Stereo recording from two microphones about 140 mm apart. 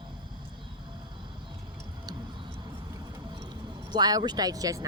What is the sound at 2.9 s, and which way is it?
Music, 25° right (ahead or behind).